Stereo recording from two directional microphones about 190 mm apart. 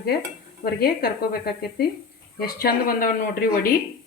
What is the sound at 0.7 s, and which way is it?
Speech, 50° left (ahead or behind).